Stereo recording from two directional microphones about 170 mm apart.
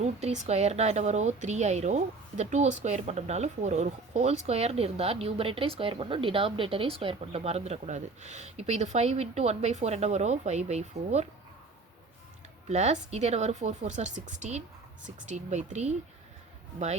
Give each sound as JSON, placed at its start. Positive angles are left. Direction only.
{"t": 0.0, "sound": "speech", "side_deg": -40}
{"t": 12.6, "sound": "a woman's voice", "side_deg": -40}